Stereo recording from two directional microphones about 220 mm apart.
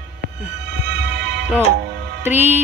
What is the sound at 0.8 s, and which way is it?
Music, 50° right (ahead or behind).